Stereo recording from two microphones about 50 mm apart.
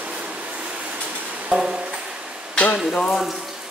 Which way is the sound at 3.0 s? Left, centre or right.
Centre.